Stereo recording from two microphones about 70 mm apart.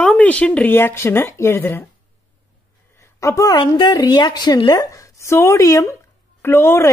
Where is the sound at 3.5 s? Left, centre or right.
Left.